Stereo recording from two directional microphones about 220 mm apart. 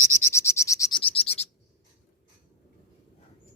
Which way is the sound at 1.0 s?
25° left (ahead or behind).